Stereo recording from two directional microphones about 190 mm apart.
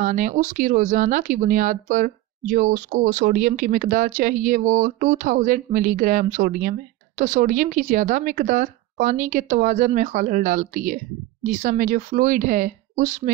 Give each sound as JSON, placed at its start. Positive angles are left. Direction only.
{"t": 0.0, "sound": "speech", "side_deg": -40}